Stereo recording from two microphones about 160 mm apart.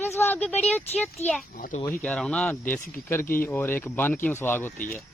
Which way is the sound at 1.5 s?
55° left (ahead or behind).